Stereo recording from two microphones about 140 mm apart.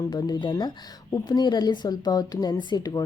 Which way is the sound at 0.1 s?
30° left (ahead or behind).